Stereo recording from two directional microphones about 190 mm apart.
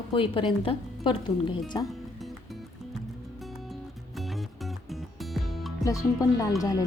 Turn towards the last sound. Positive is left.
turn(degrees=20)  # may be behind; listen again after turning